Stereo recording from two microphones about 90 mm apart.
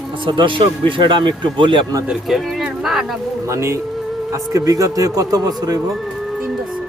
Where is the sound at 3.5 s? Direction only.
30° right (ahead or behind).